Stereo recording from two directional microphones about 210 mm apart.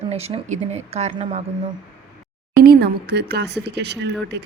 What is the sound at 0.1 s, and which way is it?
Speech, 30° right (ahead or behind).